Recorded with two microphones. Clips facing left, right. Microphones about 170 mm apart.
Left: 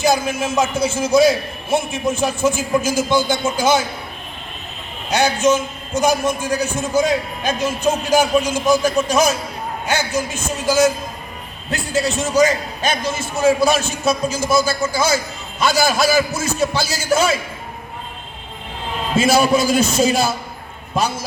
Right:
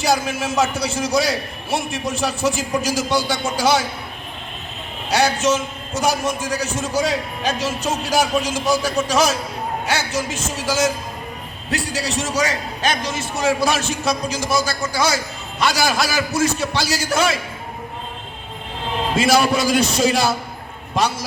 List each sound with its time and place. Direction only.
0.0 s a man's voice: 75° right (ahead or behind)
5.0 s a man's voice: 75° right (ahead or behind)
19.1 s a man's voice: 70° right (ahead or behind)